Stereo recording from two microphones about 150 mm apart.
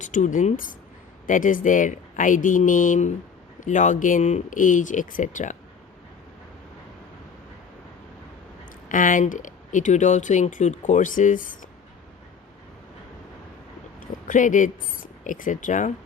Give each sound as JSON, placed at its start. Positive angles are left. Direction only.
{"t": 0.0, "sound": "speech", "side_deg": 55}
{"t": 8.9, "sound": "speech", "side_deg": 60}
{"t": 14.0, "sound": "speech", "side_deg": 60}